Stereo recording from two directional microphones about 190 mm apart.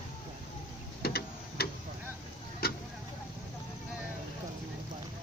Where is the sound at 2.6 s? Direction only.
55° left (ahead or behind).